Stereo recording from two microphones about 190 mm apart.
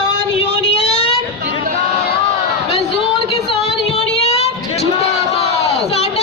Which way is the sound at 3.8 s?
35° left (ahead or behind).